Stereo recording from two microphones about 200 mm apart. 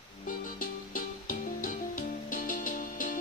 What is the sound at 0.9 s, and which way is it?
Music, 45° left (ahead or behind).